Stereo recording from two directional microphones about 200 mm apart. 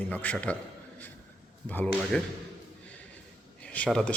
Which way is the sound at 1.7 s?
10° left (ahead or behind).